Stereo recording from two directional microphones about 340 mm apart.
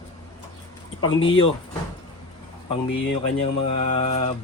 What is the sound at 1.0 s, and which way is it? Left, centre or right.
Speech, centre.